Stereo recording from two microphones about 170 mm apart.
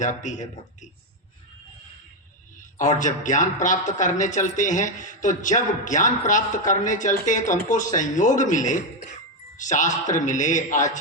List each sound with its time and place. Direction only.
0.0 s speech: 45° left (ahead or behind)
2.6 s speech: 50° left (ahead or behind)